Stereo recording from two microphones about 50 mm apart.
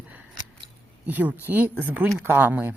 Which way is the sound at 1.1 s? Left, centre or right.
Right.